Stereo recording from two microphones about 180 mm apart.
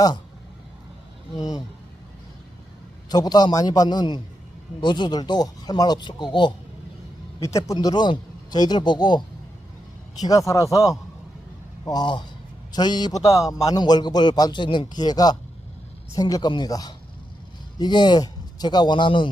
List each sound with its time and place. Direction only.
1.4 s a man's voice: 20° left (ahead or behind)
3.1 s a man's voice: 20° left (ahead or behind)